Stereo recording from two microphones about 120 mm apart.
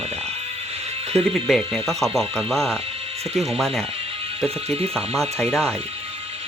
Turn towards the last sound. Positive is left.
turn(degrees=0)  # may be behind; listen again after turning